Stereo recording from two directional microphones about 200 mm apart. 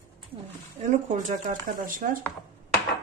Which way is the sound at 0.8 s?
35° right (ahead or behind).